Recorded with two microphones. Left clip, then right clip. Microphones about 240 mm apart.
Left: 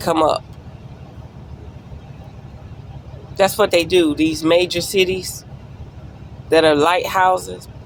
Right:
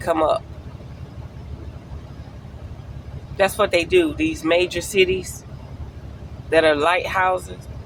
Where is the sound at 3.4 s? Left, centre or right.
Left.